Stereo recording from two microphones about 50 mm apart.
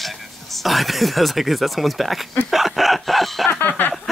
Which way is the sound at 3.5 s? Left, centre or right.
Left.